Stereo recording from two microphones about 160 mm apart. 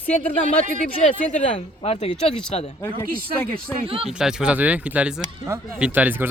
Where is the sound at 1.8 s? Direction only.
40° left (ahead or behind).